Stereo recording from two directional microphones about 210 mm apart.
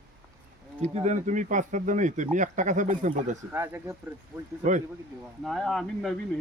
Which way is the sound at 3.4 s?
10° right (ahead or behind).